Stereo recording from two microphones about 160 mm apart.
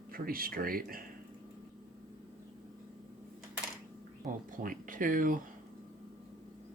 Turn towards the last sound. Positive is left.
turn(degrees=-55)  # may be behind; listen again after turning